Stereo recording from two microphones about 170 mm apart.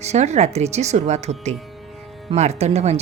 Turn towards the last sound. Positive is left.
turn(degrees=-40)  # may be behind; listen again after turning